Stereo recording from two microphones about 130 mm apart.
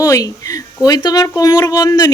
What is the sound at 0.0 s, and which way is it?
Speech, 25° left (ahead or behind).